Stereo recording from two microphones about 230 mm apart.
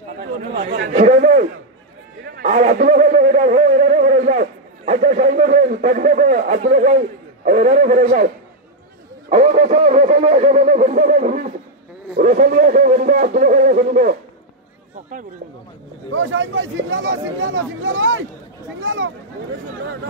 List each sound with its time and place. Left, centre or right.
0.9 s a man's voice: right
9.3 s speech: right
16.1 s speech: right